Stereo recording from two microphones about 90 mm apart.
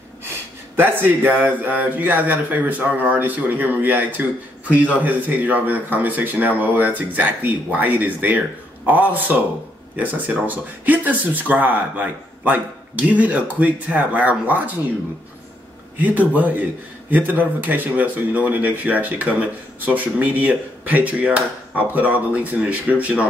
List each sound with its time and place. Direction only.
0.7 s a man's voice: 20° right (ahead or behind)
16.0 s speech: 20° right (ahead or behind)